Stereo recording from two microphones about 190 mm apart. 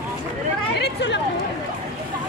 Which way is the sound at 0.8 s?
70° left (ahead or behind).